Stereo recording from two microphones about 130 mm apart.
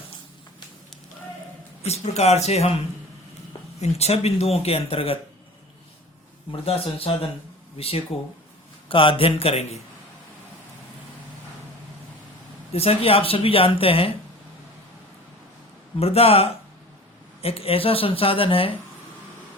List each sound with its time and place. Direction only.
1.8 s speech: 55° left (ahead or behind)
6.5 s speech: 50° left (ahead or behind)
12.7 s speech: 50° left (ahead or behind)
16.0 s speech: 50° left (ahead or behind)